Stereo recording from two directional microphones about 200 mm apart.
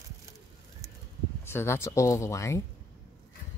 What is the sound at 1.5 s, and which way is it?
Speech, 10° left (ahead or behind).